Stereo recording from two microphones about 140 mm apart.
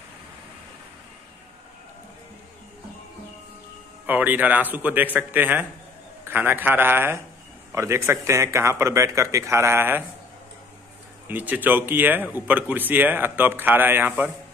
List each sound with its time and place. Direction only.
4.0 s a man's voice: 10° right (ahead or behind)
11.2 s speech: 15° right (ahead or behind)